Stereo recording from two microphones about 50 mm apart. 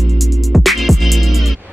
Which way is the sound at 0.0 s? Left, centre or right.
Centre.